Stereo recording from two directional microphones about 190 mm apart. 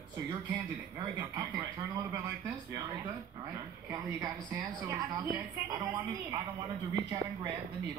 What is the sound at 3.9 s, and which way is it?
A woman's voice, 20° right (ahead or behind).